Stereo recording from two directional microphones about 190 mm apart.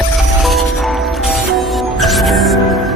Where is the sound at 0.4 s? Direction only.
Centre (ahead or behind).